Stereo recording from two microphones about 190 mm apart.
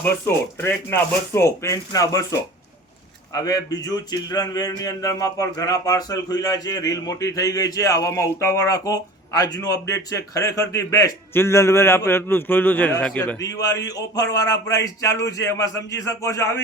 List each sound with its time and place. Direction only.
0.0 s speech: 10° left (ahead or behind)
13.4 s speech: 20° left (ahead or behind)